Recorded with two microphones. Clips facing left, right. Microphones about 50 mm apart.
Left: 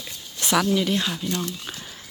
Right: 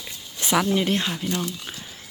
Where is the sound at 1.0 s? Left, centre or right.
Centre.